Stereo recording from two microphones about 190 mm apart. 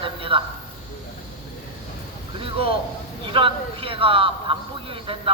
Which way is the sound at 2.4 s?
30° right (ahead or behind).